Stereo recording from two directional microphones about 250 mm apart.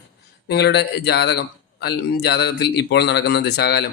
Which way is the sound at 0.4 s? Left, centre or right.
Left.